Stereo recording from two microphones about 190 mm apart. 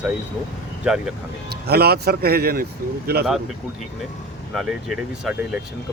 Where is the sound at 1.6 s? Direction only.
55° right (ahead or behind).